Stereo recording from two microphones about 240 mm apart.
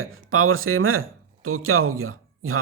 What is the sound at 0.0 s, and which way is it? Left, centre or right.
Speech, right.